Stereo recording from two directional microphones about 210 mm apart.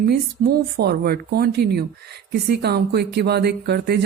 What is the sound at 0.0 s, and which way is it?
A woman's voice, 50° right (ahead or behind).